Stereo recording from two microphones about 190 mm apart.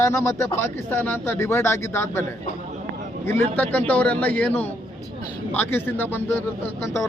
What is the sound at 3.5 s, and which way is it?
Speech, 10° left (ahead or behind).